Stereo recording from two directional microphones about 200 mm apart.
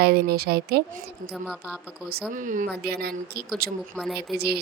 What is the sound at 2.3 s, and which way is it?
Speech, 40° right (ahead or behind).